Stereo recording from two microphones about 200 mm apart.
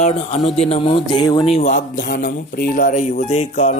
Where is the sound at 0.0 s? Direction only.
35° left (ahead or behind).